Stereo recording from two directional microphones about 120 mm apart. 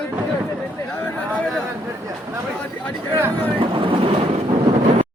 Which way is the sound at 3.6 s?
45° right (ahead or behind).